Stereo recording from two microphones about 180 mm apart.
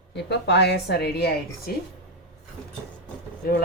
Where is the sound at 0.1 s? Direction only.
70° left (ahead or behind).